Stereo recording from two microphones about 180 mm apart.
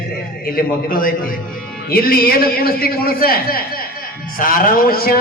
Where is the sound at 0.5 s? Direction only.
50° left (ahead or behind).